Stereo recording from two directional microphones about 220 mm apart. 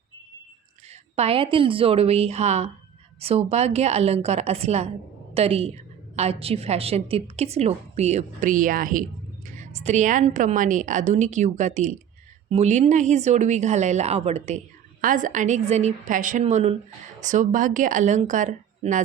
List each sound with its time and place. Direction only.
1.1 s a woman's voice: 25° right (ahead or behind)